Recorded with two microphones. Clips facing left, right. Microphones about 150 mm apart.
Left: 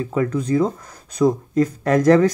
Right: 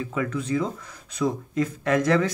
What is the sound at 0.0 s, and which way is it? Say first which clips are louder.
Speech: left 6 dB; 40° left (ahead or behind).